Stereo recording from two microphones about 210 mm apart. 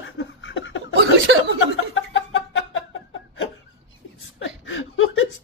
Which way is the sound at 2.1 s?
65° left (ahead or behind).